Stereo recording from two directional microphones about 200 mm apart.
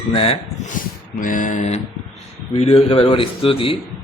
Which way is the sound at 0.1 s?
30° left (ahead or behind).